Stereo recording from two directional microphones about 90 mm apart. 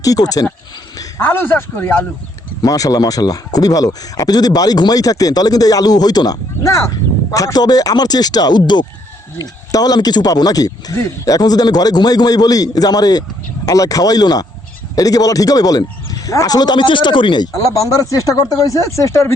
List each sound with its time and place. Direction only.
0.0 s speech: 40° left (ahead or behind)
1.2 s speech: 25° left (ahead or behind)
2.6 s speech: 40° left (ahead or behind)
6.6 s speech: 35° left (ahead or behind); by 17.7 s 50° left (ahead or behind)
17.7 s speech: 35° left (ahead or behind)